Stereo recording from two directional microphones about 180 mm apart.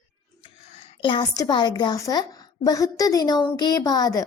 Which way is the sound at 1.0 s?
25° left (ahead or behind).